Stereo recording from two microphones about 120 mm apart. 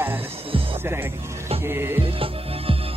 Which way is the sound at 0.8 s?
20° right (ahead or behind).